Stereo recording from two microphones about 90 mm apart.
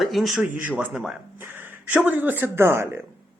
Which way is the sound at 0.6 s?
20° right (ahead or behind).